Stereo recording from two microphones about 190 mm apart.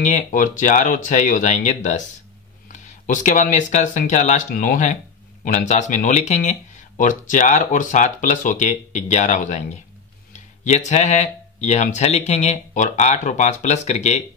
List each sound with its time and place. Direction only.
0.0 s speech: 40° left (ahead or behind)
10.3 s a sound: 40° left (ahead or behind)
10.9 s speech: 40° left (ahead or behind)